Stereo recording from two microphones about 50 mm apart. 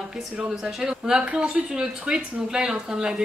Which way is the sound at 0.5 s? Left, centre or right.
Centre.